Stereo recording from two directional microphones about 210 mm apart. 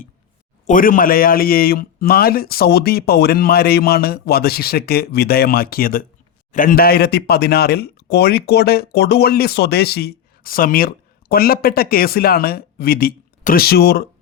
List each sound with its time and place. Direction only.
0.7 s speech: 40° left (ahead or behind)